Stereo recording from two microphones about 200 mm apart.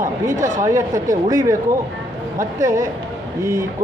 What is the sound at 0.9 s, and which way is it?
Speech, 40° right (ahead or behind).